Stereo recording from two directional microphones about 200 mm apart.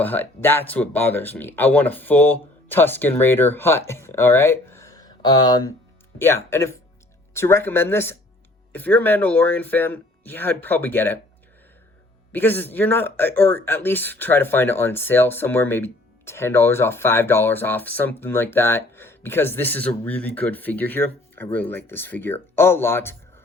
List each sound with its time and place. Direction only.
0.0 s speech: 10° left (ahead or behind)
12.3 s speech: 10° left (ahead or behind)